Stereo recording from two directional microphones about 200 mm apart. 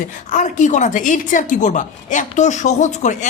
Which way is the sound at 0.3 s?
40° left (ahead or behind).